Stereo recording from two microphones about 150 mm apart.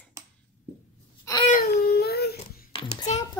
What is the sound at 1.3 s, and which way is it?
Wail, 20° left (ahead or behind).